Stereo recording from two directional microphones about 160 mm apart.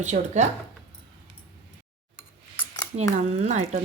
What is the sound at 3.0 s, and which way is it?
Speech, 40° right (ahead or behind).